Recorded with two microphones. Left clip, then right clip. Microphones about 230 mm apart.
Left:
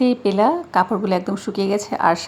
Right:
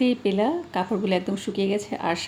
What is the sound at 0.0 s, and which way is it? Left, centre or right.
A woman's voice, centre.